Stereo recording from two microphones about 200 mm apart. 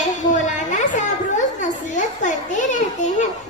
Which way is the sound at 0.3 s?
40° left (ahead or behind).